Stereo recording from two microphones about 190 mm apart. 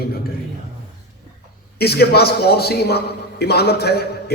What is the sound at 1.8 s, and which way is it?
A man's voice, 55° left (ahead or behind).